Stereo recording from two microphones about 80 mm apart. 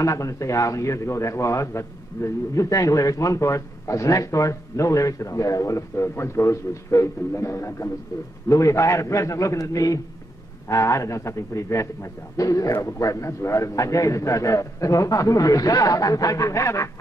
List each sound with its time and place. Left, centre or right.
0.0 s a man's voice: left